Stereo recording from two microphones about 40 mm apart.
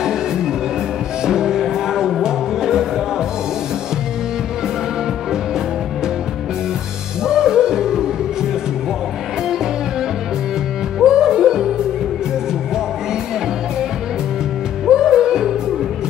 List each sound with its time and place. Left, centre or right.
1.2 s music: centre
7.2 s music: centre
11.1 s music: centre
14.9 s music: centre